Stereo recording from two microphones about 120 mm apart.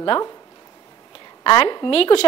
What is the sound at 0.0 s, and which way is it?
Speech, 40° left (ahead or behind).